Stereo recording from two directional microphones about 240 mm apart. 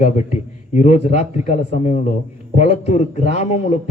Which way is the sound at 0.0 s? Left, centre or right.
Left.